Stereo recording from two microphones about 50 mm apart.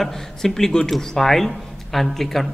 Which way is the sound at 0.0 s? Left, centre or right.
Centre.